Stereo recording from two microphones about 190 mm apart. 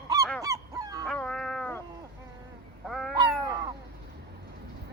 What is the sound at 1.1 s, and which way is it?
Cat, 5° left (ahead or behind).